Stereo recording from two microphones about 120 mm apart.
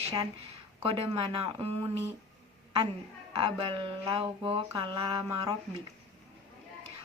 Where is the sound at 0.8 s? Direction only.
50° right (ahead or behind).